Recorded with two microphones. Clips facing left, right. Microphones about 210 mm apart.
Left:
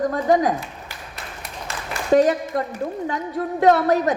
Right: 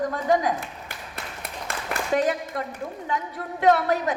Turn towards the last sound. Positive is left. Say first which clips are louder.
# left 4 dB
turn(degrees=40)  # may be behind; listen again after turning